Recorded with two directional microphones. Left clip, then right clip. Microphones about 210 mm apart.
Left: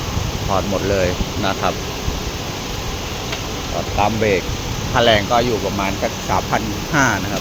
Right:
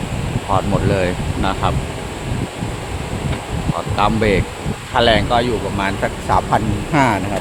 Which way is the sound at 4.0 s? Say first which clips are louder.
Right 1 dB; 20° right (ahead or behind).